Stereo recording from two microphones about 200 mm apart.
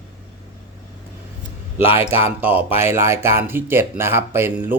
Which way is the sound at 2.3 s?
10° right (ahead or behind).